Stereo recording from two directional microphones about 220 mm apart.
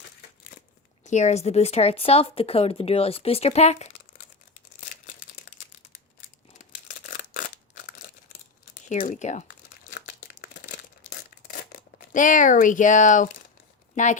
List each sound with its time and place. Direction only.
1.1 s speech: 30° left (ahead or behind)
6.8 s scissors: 35° left (ahead or behind)
8.9 s crumpling: 35° left (ahead or behind)
11.5 s speech: 35° left (ahead or behind)